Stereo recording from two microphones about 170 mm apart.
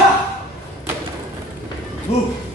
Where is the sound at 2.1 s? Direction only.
40° left (ahead or behind).